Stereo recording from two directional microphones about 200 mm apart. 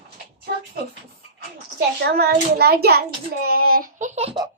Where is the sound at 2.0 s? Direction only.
55° right (ahead or behind); by 4.3 s 35° right (ahead or behind).